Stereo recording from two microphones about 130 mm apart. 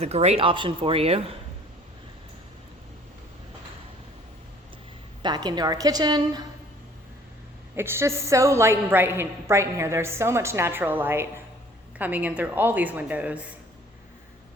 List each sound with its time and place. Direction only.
0.0 s speech: 55° right (ahead or behind)
5.2 s a woman's voice: 35° right (ahead or behind)
7.8 s a woman's voice: 20° right (ahead or behind)